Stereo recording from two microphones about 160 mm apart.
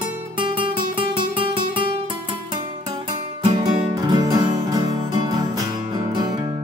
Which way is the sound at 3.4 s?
30° right (ahead or behind).